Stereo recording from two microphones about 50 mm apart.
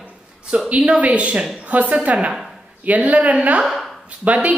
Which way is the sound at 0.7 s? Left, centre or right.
Right.